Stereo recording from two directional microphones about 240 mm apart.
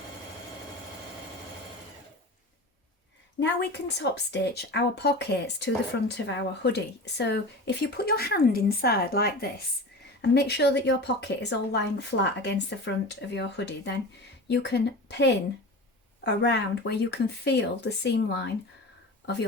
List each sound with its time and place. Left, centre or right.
3.4 s speech: left